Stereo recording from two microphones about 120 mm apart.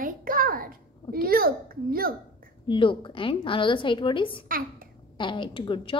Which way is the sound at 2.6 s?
45° left (ahead or behind).